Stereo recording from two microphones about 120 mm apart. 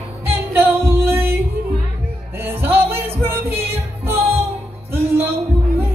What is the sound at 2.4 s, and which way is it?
Music, 20° right (ahead or behind).